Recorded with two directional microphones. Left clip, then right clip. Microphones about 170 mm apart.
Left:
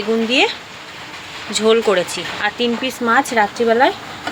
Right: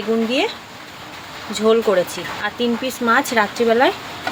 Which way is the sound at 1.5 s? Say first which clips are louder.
Left 1 dB; centre (ahead or behind).